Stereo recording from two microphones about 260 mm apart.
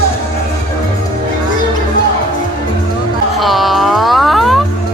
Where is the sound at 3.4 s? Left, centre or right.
Centre.